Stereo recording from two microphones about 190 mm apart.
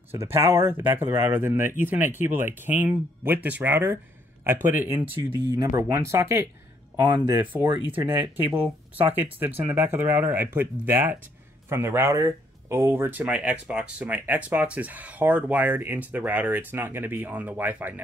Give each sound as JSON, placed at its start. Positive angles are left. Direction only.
{"t": 0.4, "sound": "speech", "side_deg": -15}
{"t": 8.1, "sound": "speech", "side_deg": -10}